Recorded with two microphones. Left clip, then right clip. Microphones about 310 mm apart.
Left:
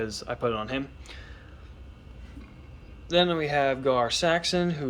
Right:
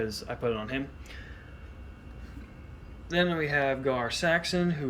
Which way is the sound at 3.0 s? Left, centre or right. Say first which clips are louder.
Left 4 dB; centre.